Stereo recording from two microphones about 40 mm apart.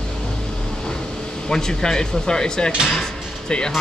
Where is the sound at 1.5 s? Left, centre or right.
Centre.